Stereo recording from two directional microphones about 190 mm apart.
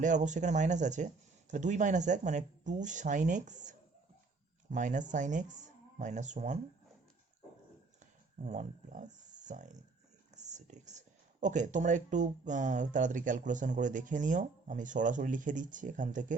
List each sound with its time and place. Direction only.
0.0 s speech: 40° right (ahead or behind)
7.9 s a sound: 40° right (ahead or behind)
10.3 s speech: 40° right (ahead or behind)